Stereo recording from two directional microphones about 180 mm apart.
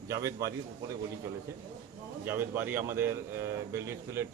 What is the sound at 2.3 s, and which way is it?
Speech, 10° right (ahead or behind).